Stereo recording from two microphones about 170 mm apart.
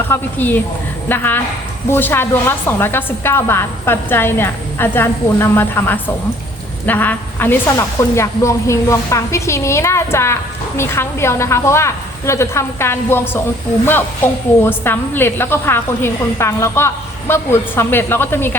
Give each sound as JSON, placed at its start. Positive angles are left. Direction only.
{"t": 0.1, "sound": "a woman's voice", "side_deg": 10}
{"t": 14.6, "sound": "a woman's voice", "side_deg": 15}